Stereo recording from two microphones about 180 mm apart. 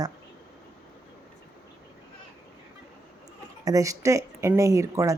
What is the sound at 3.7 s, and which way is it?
A woman's voice, 20° right (ahead or behind).